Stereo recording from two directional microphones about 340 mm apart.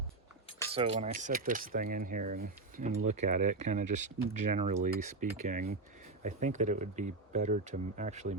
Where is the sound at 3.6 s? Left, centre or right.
Right.